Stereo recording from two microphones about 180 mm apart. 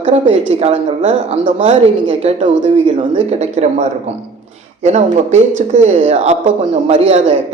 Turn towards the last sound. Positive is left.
turn(degrees=-35)  # may be behind; listen again after turning